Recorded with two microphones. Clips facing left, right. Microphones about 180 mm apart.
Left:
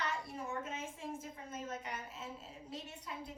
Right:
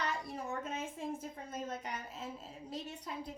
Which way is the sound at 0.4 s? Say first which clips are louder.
Right 3 dB; 35° right (ahead or behind).